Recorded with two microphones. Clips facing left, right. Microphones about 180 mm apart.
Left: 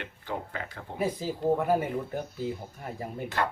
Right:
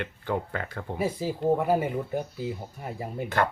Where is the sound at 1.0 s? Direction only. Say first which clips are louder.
Right 1 dB; 10° right (ahead or behind).